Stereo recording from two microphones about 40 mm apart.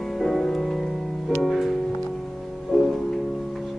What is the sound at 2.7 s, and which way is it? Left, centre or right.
Music, centre.